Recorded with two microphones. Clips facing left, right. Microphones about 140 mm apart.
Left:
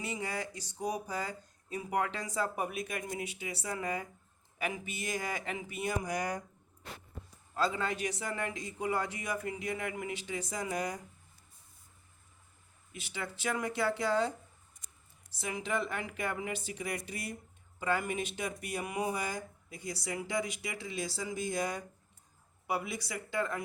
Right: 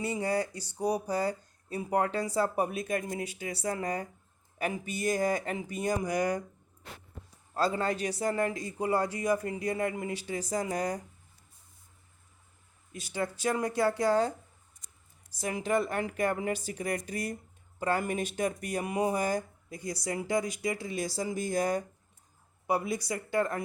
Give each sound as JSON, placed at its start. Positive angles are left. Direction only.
{"t": 0.2, "sound": "speech", "side_deg": -35}
{"t": 7.5, "sound": "speech", "side_deg": -40}
{"t": 12.9, "sound": "speech", "side_deg": -40}